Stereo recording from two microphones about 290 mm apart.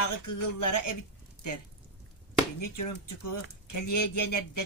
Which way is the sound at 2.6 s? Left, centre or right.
Left.